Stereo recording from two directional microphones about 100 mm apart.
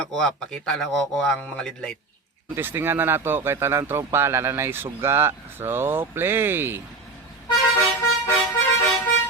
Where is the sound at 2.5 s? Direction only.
25° right (ahead or behind).